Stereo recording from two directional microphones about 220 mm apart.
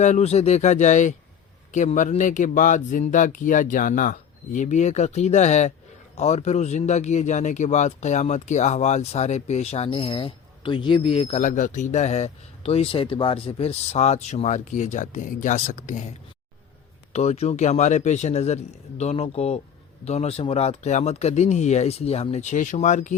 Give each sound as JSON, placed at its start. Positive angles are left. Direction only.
{"t": 0.0, "sound": "speech", "side_deg": 30}
{"t": 17.1, "sound": "speech", "side_deg": 30}